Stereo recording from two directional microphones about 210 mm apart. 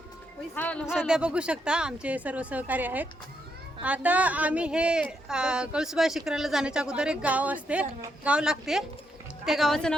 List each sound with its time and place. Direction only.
0.5 s speech: 5° left (ahead or behind)